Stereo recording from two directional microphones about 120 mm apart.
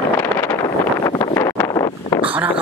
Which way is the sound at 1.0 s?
30° left (ahead or behind).